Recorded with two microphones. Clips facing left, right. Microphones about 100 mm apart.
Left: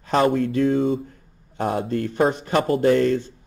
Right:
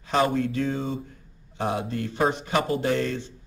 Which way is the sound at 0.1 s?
45° left (ahead or behind).